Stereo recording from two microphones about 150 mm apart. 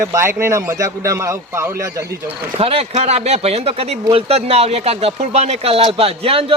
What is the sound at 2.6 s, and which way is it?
Speech, 40° right (ahead or behind).